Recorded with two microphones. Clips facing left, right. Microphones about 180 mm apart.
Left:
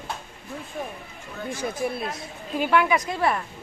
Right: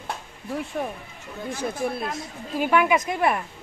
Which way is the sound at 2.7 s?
15° right (ahead or behind).